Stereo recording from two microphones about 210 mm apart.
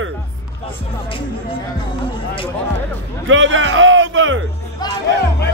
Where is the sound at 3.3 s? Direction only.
65° right (ahead or behind).